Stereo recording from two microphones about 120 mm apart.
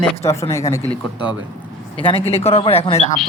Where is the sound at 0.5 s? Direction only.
25° left (ahead or behind).